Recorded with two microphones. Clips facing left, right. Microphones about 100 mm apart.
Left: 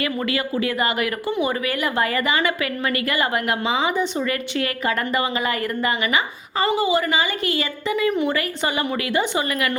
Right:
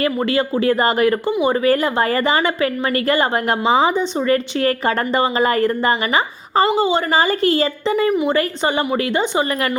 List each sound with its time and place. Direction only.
0.0 s a woman's voice: 30° right (ahead or behind)